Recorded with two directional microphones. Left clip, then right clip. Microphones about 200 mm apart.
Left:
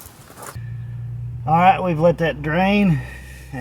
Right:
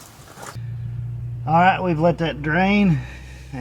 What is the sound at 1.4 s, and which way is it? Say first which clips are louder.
Speech: left 2 dB; 30° left (ahead or behind).